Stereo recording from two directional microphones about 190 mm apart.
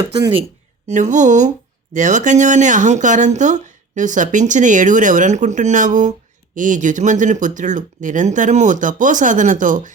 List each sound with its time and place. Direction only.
0.0 s speech: 25° right (ahead or behind)
0.9 s speech: 40° right (ahead or behind)